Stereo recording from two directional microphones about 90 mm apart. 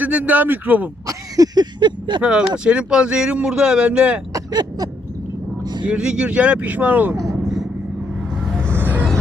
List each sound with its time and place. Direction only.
0.0 s speech: 15° right (ahead or behind)
1.0 s a sound: 40° right (ahead or behind)
1.8 s speech: 60° right (ahead or behind)
2.2 s speech: 10° right (ahead or behind)
5.8 s speech: 10° right (ahead or behind)
7.4 s vehicle: centre (ahead or behind)
8.4 s music: 5° right (ahead or behind)
8.8 s music: 20° right (ahead or behind)